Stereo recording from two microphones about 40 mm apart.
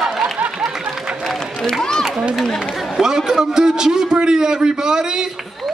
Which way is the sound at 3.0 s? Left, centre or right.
Centre.